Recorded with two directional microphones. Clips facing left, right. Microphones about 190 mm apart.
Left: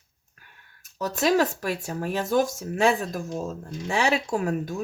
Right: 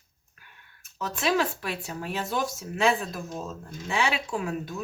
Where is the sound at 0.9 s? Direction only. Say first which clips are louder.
Left 4 dB; 40° left (ahead or behind).